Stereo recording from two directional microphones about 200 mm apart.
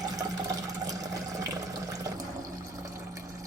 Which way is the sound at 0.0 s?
20° right (ahead or behind).